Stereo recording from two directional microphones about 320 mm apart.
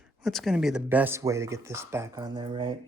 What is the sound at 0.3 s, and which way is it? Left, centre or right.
Speech, centre.